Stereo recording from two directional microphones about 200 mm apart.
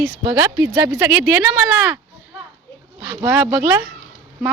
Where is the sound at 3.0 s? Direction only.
15° right (ahead or behind).